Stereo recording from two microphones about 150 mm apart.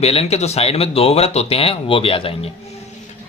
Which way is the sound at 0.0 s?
45° left (ahead or behind).